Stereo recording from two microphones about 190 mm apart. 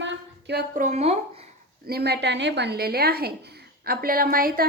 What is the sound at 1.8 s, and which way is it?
A woman's voice, 55° right (ahead or behind).